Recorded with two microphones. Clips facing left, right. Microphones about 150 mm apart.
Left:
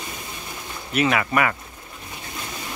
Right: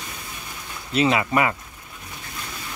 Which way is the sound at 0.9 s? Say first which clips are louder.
Right 1 dB; 25° right (ahead or behind).